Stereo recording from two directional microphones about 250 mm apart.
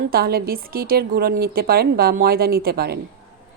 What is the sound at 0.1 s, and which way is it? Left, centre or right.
Speech, right.